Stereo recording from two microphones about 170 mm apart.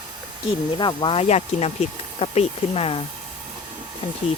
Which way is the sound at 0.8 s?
25° left (ahead or behind).